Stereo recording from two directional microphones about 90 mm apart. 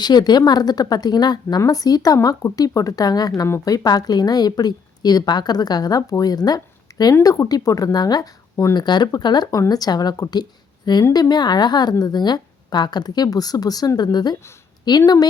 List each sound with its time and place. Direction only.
0.0 s speech: 50° left (ahead or behind)